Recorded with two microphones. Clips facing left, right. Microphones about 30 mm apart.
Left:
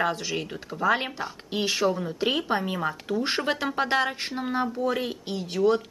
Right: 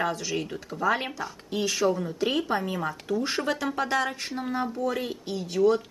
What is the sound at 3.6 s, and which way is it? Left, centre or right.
Speech, left.